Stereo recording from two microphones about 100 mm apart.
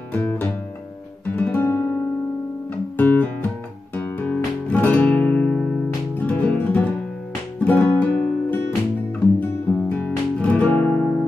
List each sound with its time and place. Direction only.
0.1 s music: 15° left (ahead or behind)
3.0 s music: 15° left (ahead or behind)